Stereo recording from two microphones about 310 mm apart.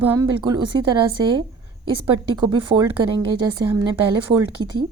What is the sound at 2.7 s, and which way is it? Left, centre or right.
Speech, right.